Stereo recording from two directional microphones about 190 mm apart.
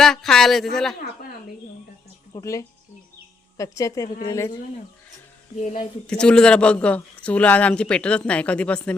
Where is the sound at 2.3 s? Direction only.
15° left (ahead or behind).